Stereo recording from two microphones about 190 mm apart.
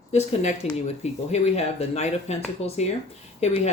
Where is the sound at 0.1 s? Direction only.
35° left (ahead or behind).